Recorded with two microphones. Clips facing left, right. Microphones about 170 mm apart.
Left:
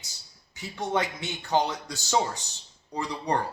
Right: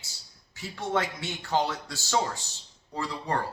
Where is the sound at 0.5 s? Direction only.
15° left (ahead or behind).